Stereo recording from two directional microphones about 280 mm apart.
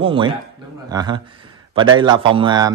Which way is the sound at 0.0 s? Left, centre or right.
Centre.